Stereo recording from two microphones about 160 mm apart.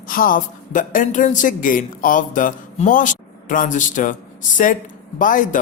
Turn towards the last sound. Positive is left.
turn(degrees=55)  # may be behind; listen again after turning